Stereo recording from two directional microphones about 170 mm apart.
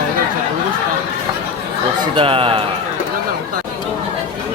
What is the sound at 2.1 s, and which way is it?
Speech, 30° right (ahead or behind).